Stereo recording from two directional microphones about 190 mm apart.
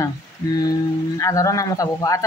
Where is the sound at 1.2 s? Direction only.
15° left (ahead or behind).